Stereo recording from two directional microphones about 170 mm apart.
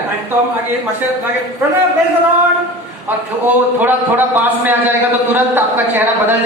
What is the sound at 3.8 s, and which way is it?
A man's voice, 10° right (ahead or behind).